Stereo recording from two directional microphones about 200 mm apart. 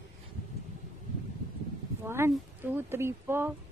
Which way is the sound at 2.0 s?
10° right (ahead or behind).